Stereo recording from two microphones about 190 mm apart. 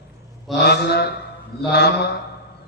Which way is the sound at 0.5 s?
60° left (ahead or behind).